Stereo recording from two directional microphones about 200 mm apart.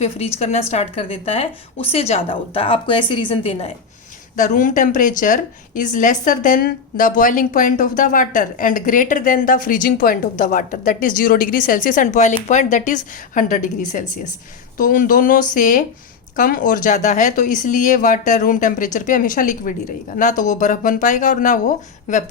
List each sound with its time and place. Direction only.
0.0 s speech: 30° left (ahead or behind)
4.4 s speech: 40° left (ahead or behind)